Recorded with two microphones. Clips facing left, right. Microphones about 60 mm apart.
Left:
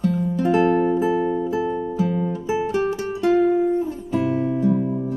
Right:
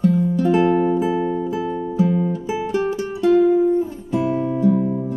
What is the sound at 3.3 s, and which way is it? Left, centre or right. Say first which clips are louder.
Music: right 3 dB; centre.